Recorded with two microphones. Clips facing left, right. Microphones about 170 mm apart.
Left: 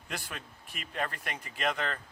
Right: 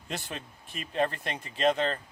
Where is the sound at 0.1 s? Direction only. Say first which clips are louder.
Right 4 dB; 25° right (ahead or behind).